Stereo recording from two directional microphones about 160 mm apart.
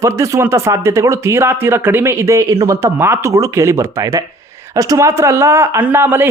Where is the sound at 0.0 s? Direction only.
15° right (ahead or behind).